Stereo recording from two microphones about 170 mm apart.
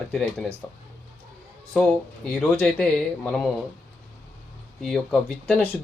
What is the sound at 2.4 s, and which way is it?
Speech, 5° left (ahead or behind).